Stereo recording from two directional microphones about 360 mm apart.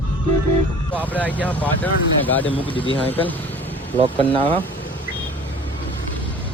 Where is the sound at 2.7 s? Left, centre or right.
Centre.